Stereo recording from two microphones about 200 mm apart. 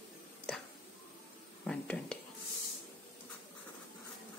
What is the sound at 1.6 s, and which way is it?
Speech, 5° left (ahead or behind).